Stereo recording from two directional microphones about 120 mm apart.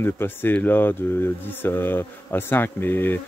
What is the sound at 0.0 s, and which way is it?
Speech, 20° left (ahead or behind).